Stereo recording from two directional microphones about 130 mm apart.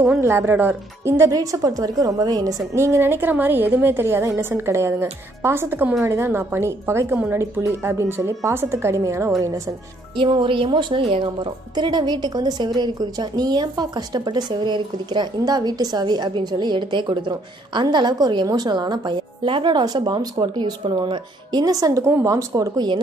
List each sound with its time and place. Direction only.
0.2 s a woman's voice: 20° right (ahead or behind)
10.1 s a woman's voice: 40° right (ahead or behind)